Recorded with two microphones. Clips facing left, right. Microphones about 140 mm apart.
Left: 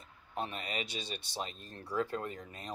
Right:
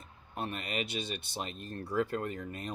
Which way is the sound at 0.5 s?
55° right (ahead or behind).